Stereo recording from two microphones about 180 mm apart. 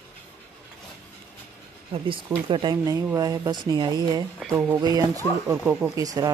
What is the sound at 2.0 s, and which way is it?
Speech, 30° right (ahead or behind).